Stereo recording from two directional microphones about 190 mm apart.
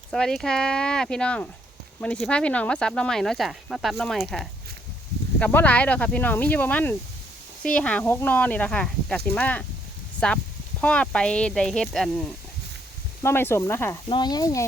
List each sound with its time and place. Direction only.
0.1 s speech: 5° left (ahead or behind)
13.2 s speech: 10° left (ahead or behind)